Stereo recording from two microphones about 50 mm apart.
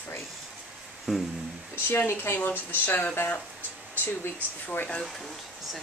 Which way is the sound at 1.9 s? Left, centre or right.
Left.